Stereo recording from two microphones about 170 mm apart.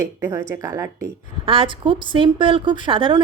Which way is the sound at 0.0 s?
15° right (ahead or behind).